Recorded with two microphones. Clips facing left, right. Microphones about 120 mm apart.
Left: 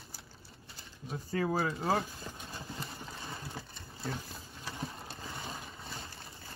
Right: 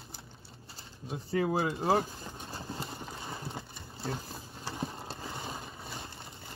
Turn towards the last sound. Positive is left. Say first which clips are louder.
# right 4 dB
turn(degrees=-30)  # may be behind; listen again after turning